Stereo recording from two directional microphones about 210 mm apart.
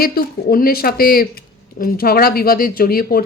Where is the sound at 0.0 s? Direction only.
45° left (ahead or behind).